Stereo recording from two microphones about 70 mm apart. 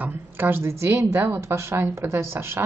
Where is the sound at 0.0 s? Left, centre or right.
Right.